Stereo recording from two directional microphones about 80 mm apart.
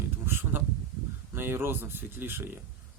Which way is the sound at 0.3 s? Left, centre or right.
Right.